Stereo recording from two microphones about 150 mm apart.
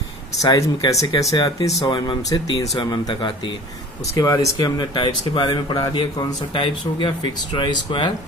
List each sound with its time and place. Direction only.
0.4 s speech: 25° left (ahead or behind)